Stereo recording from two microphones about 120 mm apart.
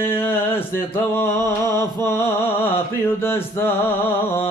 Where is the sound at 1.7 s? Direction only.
35° right (ahead or behind).